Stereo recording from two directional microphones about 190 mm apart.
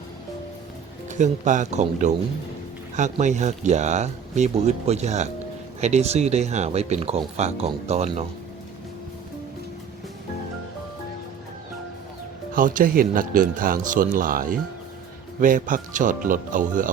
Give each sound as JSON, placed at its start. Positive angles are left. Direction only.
{"t": 1.2, "sound": "speech", "side_deg": -40}
{"t": 12.5, "sound": "speech", "side_deg": -45}